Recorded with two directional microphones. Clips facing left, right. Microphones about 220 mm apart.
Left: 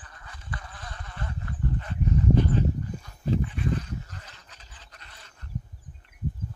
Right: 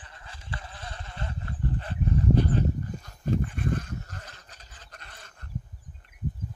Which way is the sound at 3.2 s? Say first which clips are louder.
Left 1 dB; 50° right (ahead or behind).